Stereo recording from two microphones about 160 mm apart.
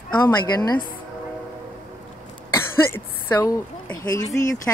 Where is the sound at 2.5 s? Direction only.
20° left (ahead or behind).